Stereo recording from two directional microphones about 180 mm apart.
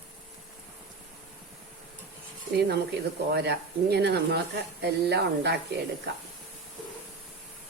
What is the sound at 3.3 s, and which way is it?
Speech, 65° right (ahead or behind).